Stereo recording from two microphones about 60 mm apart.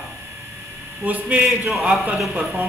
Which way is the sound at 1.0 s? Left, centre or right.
Right.